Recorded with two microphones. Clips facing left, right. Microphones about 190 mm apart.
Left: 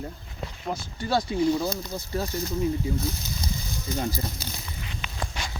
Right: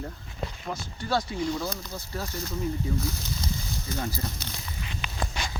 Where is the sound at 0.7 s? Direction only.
25° left (ahead or behind).